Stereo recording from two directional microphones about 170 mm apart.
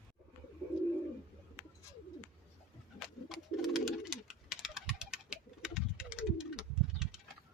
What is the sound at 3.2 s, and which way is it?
Bird, centre (ahead or behind).